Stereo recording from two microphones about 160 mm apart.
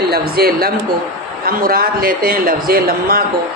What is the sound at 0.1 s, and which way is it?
A man's voice, 70° right (ahead or behind).